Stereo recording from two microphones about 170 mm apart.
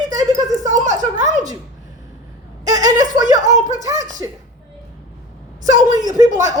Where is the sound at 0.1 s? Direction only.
20° right (ahead or behind).